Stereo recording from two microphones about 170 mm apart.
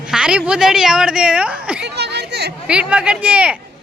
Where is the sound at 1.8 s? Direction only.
80° right.